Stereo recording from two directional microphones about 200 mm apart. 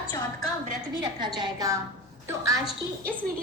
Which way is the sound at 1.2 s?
20° right (ahead or behind).